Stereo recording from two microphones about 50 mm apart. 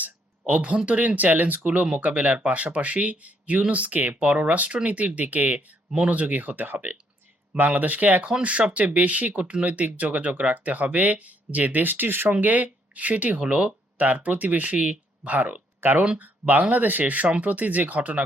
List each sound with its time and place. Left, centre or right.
0.0 s a sound: right
0.9 s speech: right
12.3 s speech: right
15.8 s speech: right
16.1 s speech: right